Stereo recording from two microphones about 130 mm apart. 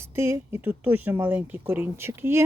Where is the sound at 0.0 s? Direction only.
20° right (ahead or behind).